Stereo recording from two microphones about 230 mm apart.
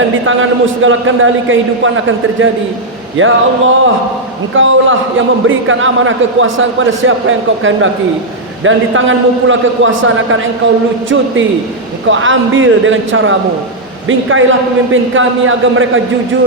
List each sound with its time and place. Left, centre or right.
0.3 s a man's voice: right